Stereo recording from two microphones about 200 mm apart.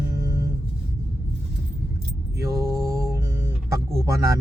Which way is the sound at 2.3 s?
15° right (ahead or behind).